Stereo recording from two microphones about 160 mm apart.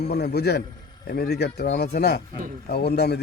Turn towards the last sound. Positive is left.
turn(degrees=85)